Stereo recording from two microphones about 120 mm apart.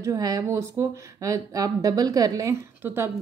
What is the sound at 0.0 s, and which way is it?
A woman's voice, 30° right (ahead or behind).